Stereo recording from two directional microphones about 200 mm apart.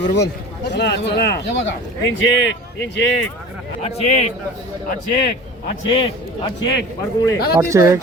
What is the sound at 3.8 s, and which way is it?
Speech, 35° left (ahead or behind).